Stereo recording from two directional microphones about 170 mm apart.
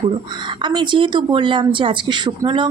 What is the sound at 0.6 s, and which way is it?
Speech, 25° right (ahead or behind).